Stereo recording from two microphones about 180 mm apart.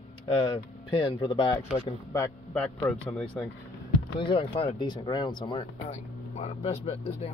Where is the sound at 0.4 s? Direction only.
30° left (ahead or behind).